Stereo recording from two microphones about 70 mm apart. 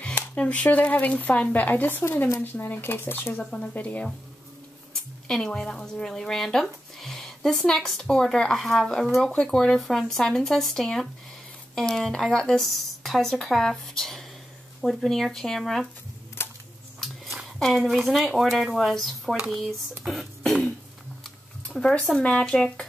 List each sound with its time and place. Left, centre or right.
0.0 s speech: centre
3.4 s speech: centre
5.3 s speech: centre
16.4 s a sound: left
17.8 s speech: centre
21.2 s a sound: centre
22.2 s speech: centre